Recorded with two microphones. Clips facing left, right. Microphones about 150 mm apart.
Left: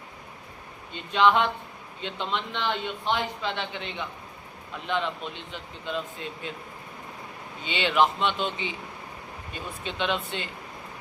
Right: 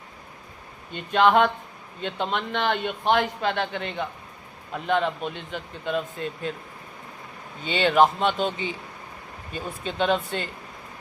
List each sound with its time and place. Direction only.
0.9 s a man's voice: 50° right (ahead or behind)
7.6 s a man's voice: 45° right (ahead or behind)